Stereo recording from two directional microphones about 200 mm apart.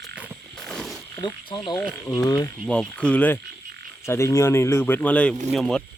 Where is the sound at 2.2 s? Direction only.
15° left (ahead or behind).